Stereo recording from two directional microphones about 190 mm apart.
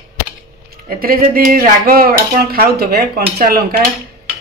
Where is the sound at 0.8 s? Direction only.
50° right (ahead or behind).